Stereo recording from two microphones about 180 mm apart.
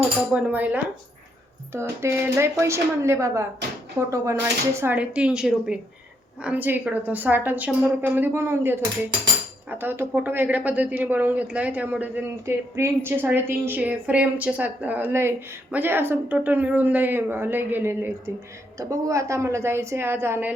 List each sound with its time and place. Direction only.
0.3 s a woman's voice: 10° right (ahead or behind)